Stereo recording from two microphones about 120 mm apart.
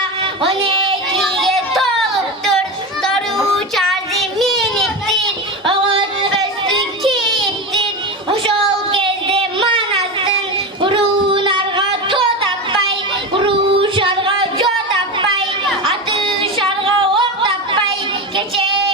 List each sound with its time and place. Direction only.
0.2 s child singing: 50° right (ahead or behind)
1.1 s a child's voice: centre (ahead or behind)
3.0 s child singing: 5° left (ahead or behind)
5.6 s yodeling: 45° right (ahead or behind)
8.3 s a sound: 50° right (ahead or behind)
13.3 s singing: 50° right (ahead or behind)
15.8 s music: 50° right (ahead or behind)
18.3 s child singing: 50° right (ahead or behind)